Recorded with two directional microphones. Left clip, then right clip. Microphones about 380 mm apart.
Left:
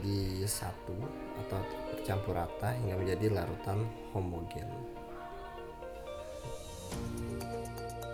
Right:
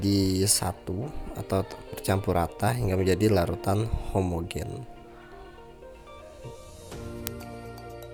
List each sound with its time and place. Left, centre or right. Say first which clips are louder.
0.0 s speech: right 12 dB; right